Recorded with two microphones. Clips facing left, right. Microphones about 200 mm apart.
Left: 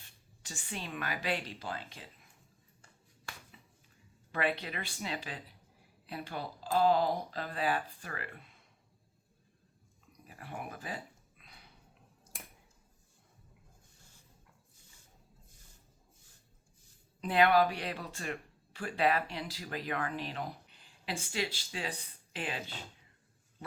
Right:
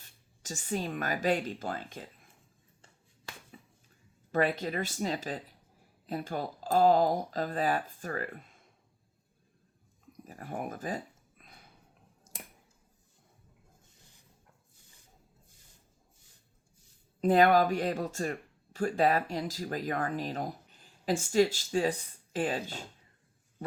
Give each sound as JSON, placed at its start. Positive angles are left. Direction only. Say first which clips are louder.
{"t": 0.4, "sound": "speech", "louder": "right 9 dB", "side_deg": -40}
{"t": 4.3, "sound": "speech", "louder": "right 5 dB", "side_deg": -40}
{"t": 10.1, "sound": "a sound", "louder": "right 6 dB", "side_deg": -45}
{"t": 17.2, "sound": "speech", "louder": "right 4 dB", "side_deg": -45}